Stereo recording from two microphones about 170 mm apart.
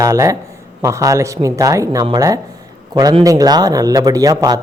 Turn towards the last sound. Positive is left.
turn(degrees=-20)  # may be behind; listen again after turning